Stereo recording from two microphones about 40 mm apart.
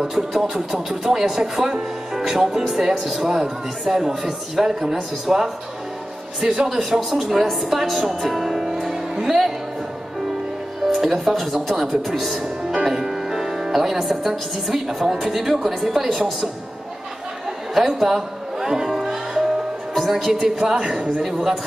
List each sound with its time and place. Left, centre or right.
0.3 s speech: centre
7.2 s speech: centre
9.1 s music: centre
10.9 s speech: centre
12.8 s music: centre
14.7 s speech: centre
17.7 s speech: centre
19.0 s music: centre
20.0 s speech: centre